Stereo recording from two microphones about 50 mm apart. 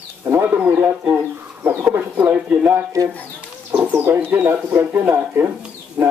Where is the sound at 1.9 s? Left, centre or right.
Right.